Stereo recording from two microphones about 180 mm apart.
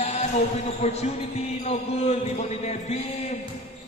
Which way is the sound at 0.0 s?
35° left (ahead or behind).